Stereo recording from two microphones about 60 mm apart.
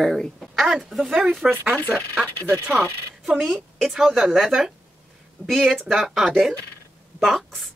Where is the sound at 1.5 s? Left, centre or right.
Right.